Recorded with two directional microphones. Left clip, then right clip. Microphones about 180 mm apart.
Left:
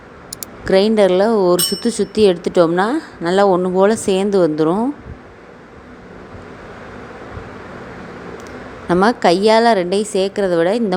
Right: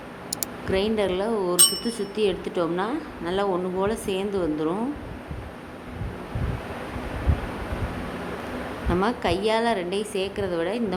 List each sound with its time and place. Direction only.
0.6 s a woman's voice: 40° left (ahead or behind)
8.9 s a woman's voice: 40° left (ahead or behind)